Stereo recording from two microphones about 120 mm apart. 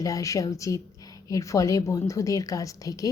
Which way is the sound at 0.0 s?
25° left (ahead or behind).